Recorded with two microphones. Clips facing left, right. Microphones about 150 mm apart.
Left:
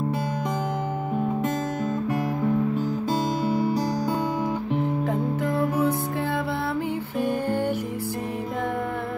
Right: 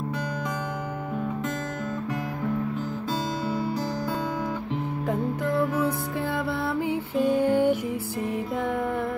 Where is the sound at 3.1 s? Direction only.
50° left (ahead or behind).